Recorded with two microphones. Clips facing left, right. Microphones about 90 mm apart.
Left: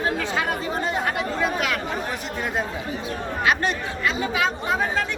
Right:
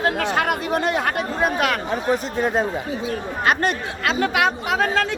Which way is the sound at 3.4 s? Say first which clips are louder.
Right 2 dB; 50° right (ahead or behind).